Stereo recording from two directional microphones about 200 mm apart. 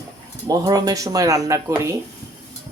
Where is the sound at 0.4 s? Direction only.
20° right (ahead or behind).